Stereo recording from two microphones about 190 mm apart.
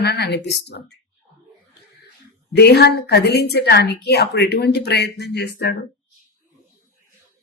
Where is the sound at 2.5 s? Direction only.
60° left (ahead or behind).